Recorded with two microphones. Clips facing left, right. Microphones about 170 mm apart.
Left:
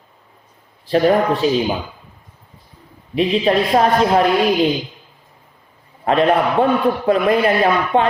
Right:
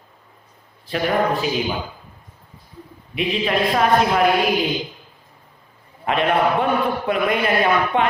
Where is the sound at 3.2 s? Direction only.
35° left (ahead or behind).